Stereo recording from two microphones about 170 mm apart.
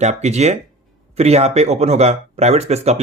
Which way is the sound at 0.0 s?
40° right (ahead or behind).